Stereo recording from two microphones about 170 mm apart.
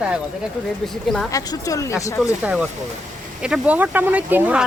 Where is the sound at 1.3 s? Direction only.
20° left (ahead or behind).